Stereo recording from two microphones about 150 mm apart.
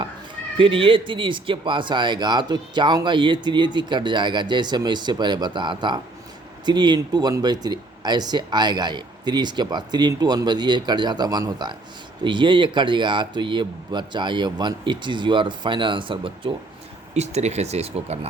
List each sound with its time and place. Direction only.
0.5 s speech: 35° right (ahead or behind)
17.2 s speech: 45° right (ahead or behind)